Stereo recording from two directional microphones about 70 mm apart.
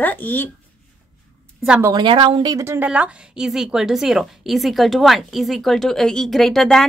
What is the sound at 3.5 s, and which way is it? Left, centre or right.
A woman's voice, centre.